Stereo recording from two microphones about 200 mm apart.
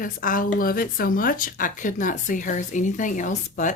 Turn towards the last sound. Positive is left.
turn(degrees=40)  # may be behind; listen again after turning